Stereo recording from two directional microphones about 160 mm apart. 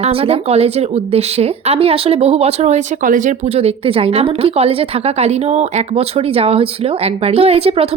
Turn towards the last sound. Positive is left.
turn(degrees=-40)  # may be behind; listen again after turning